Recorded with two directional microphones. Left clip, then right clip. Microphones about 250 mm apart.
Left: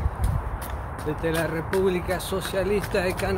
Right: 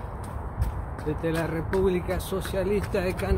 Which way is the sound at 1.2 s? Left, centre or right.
Centre.